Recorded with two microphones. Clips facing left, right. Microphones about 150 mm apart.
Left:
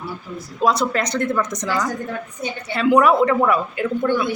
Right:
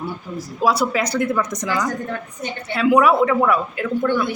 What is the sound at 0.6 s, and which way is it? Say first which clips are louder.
Speech: even; 5° right (ahead or behind).